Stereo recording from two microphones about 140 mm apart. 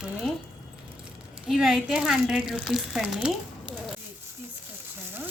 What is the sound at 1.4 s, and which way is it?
Speech, 5° right (ahead or behind).